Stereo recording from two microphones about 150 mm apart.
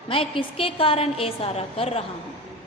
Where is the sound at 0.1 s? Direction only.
35° left (ahead or behind).